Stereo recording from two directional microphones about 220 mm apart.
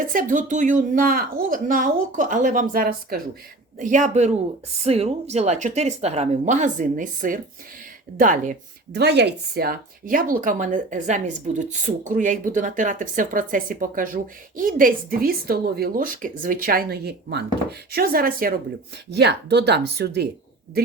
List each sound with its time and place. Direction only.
0.0 s speech: 40° right (ahead or behind)